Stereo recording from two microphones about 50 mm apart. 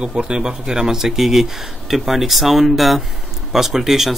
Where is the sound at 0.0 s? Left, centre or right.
Centre.